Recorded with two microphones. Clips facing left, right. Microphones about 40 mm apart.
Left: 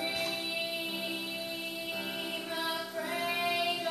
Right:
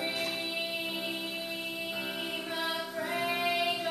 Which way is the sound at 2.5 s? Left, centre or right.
Centre.